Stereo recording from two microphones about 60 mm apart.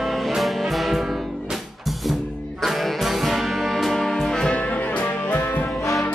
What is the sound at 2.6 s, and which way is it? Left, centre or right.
Music, centre.